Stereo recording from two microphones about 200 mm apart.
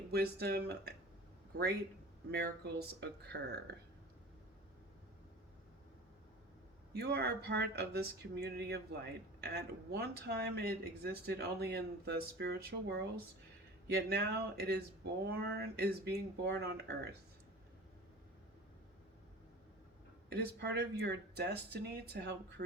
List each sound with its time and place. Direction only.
0.1 s speech: 55° right (ahead or behind)
2.3 s speech: 50° right (ahead or behind)
6.9 s speech: 55° right (ahead or behind)
20.3 s speech: 55° right (ahead or behind)